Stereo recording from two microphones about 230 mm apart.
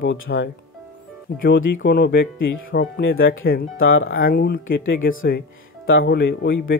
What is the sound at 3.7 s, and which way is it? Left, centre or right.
Speech, left.